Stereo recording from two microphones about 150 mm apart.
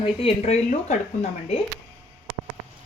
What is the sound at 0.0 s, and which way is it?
Speech, 40° left (ahead or behind).